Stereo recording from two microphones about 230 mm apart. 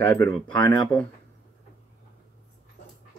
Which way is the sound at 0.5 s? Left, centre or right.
Centre.